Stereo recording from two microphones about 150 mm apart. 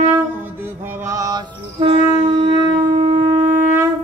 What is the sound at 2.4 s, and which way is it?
Shofar, 30° right (ahead or behind).